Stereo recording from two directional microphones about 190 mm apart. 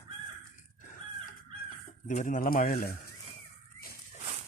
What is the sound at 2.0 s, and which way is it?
Speech, 40° left (ahead or behind).